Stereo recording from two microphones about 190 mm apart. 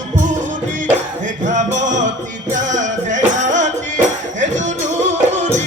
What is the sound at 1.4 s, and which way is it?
Music, 40° right (ahead or behind).